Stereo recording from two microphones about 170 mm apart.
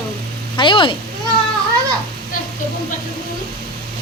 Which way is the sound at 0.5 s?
30° left (ahead or behind).